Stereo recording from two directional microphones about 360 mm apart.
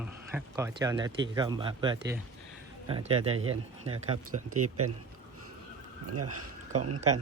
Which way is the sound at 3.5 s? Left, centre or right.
Centre.